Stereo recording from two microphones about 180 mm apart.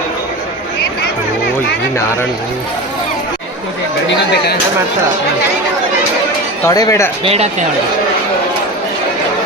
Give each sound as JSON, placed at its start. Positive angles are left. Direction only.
{"t": 6.7, "sound": "speech", "side_deg": 20}
{"t": 7.3, "sound": "speech", "side_deg": -35}